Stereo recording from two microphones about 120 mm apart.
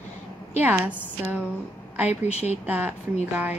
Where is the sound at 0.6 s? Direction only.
20° right (ahead or behind).